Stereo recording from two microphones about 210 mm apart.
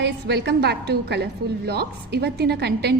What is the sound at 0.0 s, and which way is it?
A woman's voice, 55° right (ahead or behind).